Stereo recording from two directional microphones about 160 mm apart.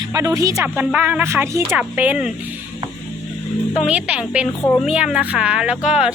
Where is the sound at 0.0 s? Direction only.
20° right (ahead or behind).